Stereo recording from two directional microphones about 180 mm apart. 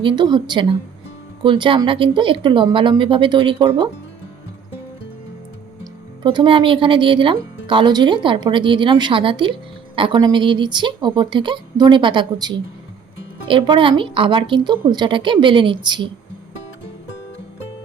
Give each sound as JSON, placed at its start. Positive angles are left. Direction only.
{"t": 0.0, "sound": "speech", "side_deg": -25}
{"t": 5.8, "sound": "speech", "side_deg": -25}